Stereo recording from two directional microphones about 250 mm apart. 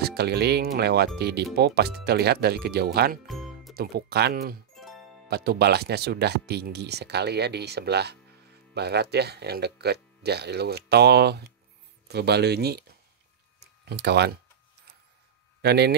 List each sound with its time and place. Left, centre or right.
0.0 s speech: right
3.3 s music: centre
3.7 s speech: right
4.7 s music: centre
5.3 s speech: right
13.8 s speech: right
15.6 s speech: right